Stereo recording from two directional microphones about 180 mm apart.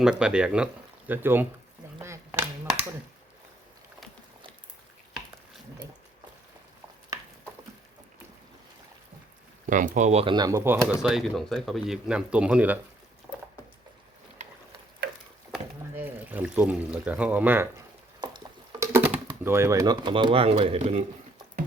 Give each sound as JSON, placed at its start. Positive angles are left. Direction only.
{"t": 0.0, "sound": "speech", "side_deg": -5}
{"t": 9.6, "sound": "speech", "side_deg": -45}
{"t": 15.0, "sound": "a sound", "side_deg": -70}
{"t": 16.0, "sound": "speech", "side_deg": -10}
{"t": 18.2, "sound": "stir", "side_deg": -25}
{"t": 18.9, "sound": "speech", "side_deg": -10}